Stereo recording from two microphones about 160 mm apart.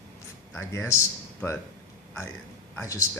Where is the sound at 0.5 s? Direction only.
15° left (ahead or behind).